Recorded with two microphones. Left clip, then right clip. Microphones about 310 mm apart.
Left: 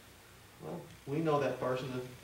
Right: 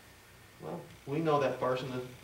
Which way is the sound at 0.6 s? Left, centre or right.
Centre.